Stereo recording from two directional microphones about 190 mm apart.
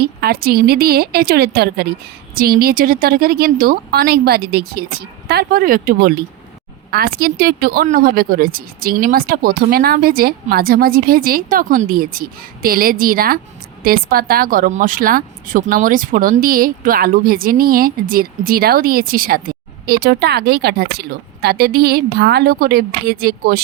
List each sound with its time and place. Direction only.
0.0 s a woman's voice: 55° right (ahead or behind)